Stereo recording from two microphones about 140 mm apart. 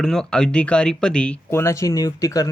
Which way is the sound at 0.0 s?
5° left (ahead or behind).